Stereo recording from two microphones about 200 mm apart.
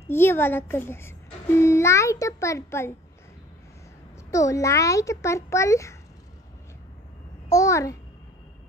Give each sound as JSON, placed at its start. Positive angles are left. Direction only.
{"t": 0.1, "sound": "a child's voice", "side_deg": 10}
{"t": 4.3, "sound": "a child's voice", "side_deg": 15}
{"t": 7.4, "sound": "a child's voice", "side_deg": 15}